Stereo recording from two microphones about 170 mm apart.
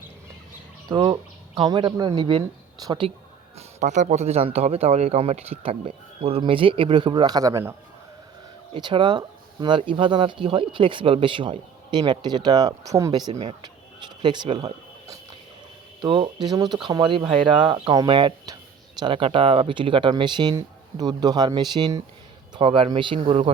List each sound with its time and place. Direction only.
0.9 s speech: 25° right (ahead or behind)
3.8 s speech: 45° right (ahead or behind); by 7.7 s 20° right (ahead or behind)
8.7 s speech: 30° right (ahead or behind)
13.3 s a sound: 35° right (ahead or behind)
16.0 s speech: 30° right (ahead or behind)